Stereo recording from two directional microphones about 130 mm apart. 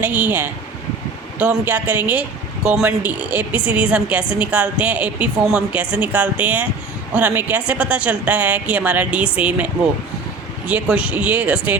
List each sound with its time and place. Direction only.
0.0 s a woman's voice: 15° right (ahead or behind)
10.7 s a woman's voice: 10° right (ahead or behind)